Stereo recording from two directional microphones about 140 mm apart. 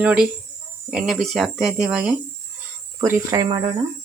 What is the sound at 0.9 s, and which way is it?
Speech, 5° right (ahead or behind).